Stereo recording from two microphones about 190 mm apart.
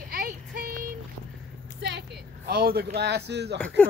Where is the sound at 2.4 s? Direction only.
50° right (ahead or behind).